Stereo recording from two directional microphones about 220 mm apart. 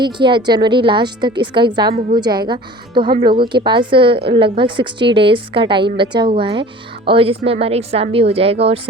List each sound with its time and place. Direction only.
0.0 s a woman's voice: 20° right (ahead or behind)